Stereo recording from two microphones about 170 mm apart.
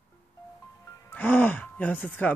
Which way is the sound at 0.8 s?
20° left (ahead or behind).